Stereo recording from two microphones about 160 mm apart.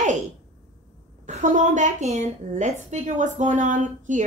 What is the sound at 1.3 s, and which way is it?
A woman's voice, 45° right (ahead or behind).